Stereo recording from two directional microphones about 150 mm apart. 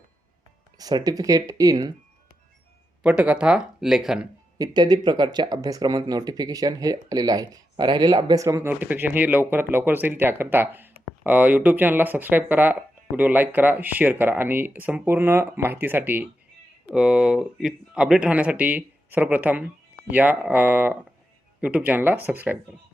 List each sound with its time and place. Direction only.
0.8 s speech: 25° right (ahead or behind)
3.0 s speech: 10° right (ahead or behind)
4.5 s speech: 25° right (ahead or behind); by 22.5 s 10° right (ahead or behind)